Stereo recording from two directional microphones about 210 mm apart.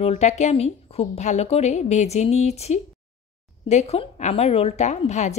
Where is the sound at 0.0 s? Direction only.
30° left (ahead or behind).